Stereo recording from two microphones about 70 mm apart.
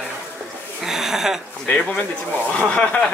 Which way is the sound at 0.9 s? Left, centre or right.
Centre.